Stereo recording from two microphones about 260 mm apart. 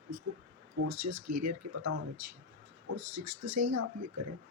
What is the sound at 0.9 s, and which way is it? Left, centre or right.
Speech, right.